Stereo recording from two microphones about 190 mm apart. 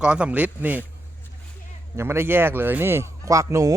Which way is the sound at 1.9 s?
15° right (ahead or behind).